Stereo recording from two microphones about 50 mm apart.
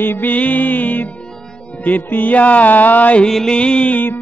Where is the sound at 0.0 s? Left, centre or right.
Left.